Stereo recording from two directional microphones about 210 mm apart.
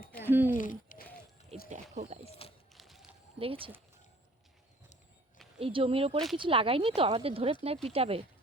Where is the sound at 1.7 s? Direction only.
30° right (ahead or behind).